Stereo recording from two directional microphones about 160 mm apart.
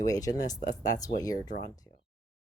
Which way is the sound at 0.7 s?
25° left (ahead or behind).